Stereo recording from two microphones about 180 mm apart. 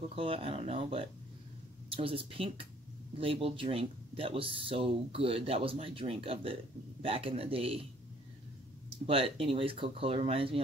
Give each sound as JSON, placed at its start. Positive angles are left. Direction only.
{"t": 0.1, "sound": "speech", "side_deg": -30}
{"t": 9.0, "sound": "speech", "side_deg": -30}